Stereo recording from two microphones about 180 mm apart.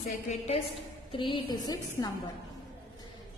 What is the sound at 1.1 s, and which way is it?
Speech, 25° left (ahead or behind).